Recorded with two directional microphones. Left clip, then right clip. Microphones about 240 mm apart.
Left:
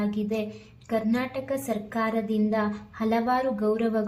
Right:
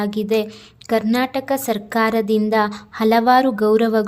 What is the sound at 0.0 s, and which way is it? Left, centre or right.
A woman's voice, right.